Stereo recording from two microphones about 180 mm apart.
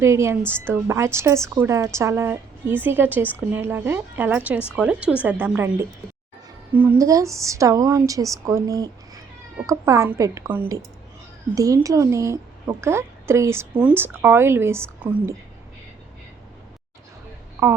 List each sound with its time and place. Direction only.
0.0 s a woman's voice: 15° right (ahead or behind)
6.7 s a woman's voice: 15° right (ahead or behind)